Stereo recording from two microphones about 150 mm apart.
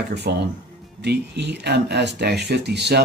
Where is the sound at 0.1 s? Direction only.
90° right.